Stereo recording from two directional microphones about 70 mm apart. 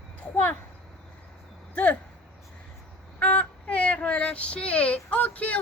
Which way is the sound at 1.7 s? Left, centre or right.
Centre.